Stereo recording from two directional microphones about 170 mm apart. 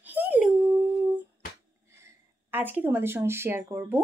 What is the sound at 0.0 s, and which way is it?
Dog, 10° right (ahead or behind).